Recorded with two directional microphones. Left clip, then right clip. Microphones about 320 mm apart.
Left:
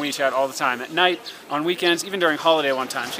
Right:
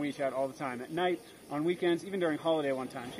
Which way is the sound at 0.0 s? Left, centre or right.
Centre.